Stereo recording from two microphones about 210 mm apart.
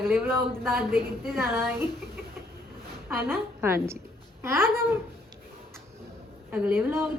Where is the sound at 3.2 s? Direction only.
10° right (ahead or behind).